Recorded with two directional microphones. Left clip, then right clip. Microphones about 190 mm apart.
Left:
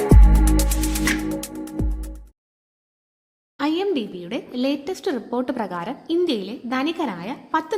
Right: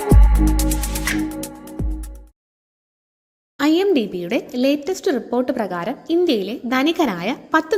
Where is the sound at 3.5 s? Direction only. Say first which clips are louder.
Right 6 dB; 15° right (ahead or behind).